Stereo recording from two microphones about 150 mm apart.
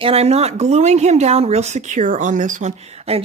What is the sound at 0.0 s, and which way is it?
Speech, 45° right (ahead or behind).